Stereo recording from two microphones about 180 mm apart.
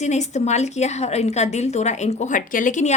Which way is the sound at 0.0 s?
40° left (ahead or behind).